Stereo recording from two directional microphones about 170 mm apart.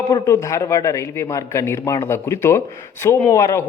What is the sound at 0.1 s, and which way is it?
A man's voice, 20° left (ahead or behind).